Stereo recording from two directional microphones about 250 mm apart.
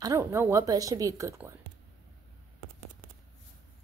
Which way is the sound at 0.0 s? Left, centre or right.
Centre.